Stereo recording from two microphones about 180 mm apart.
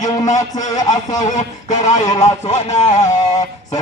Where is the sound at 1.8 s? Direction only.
40° left (ahead or behind).